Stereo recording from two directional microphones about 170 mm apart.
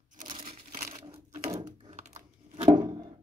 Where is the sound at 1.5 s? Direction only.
25° right (ahead or behind).